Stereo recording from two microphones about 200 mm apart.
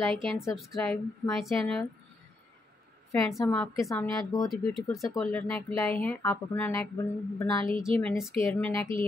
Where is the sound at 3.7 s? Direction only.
15° left (ahead or behind).